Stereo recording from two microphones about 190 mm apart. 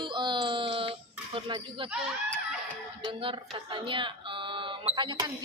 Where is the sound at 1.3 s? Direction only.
25° right (ahead or behind).